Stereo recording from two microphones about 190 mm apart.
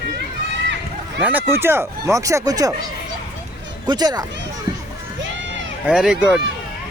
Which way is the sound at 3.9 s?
20° right (ahead or behind).